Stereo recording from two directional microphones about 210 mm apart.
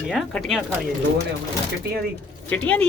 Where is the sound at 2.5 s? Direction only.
5° left (ahead or behind).